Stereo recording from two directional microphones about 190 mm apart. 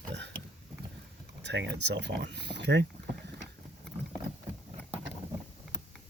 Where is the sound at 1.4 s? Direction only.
65° right (ahead or behind).